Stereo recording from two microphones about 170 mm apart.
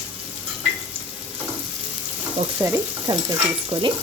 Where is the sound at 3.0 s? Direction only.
25° right (ahead or behind).